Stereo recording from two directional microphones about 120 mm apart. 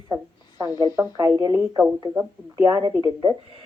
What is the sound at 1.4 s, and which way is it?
Speech, 35° right (ahead or behind).